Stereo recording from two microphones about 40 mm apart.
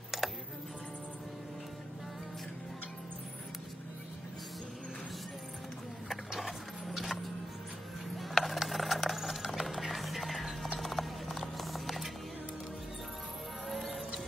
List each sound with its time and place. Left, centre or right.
0.1 s music: centre
6.9 s music: centre
8.2 s a sound: centre
10.8 s clip-clop: centre
13.7 s music: centre